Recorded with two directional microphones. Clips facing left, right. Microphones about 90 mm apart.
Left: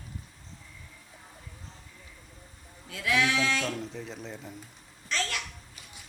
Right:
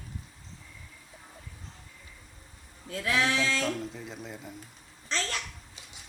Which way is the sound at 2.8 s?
35° right (ahead or behind).